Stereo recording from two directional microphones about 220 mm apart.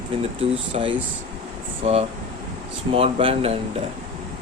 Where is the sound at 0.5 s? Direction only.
25° right (ahead or behind).